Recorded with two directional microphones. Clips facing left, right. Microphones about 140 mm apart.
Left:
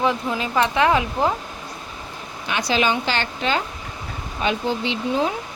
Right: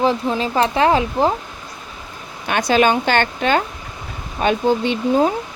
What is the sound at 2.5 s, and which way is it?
Speech, 50° right (ahead or behind).